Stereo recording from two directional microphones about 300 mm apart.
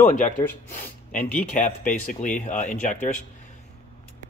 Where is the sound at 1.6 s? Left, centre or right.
Left.